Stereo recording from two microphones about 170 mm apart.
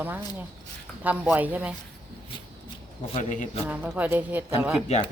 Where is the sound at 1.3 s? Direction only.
10° right (ahead or behind).